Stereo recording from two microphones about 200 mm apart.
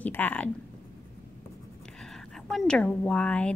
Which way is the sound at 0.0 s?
10° left (ahead or behind).